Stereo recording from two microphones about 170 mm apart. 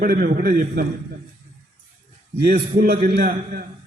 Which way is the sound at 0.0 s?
60° right (ahead or behind).